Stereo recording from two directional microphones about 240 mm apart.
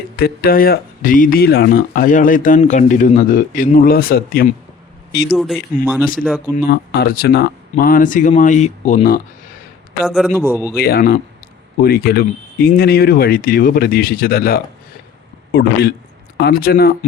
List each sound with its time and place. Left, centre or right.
0.2 s speech: left
5.3 s speech: centre
6.7 s speech: left
10.1 s speech: centre
10.8 s a man's voice: left